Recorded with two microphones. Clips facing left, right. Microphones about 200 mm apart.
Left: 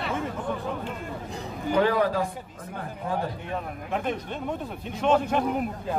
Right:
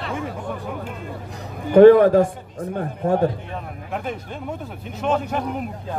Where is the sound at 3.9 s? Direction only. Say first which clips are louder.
Even; centre (ahead or behind).